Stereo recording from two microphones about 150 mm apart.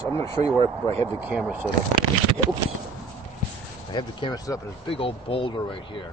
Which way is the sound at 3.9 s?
25° left (ahead or behind).